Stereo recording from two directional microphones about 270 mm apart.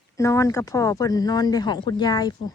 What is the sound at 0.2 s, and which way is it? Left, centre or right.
Speech, centre.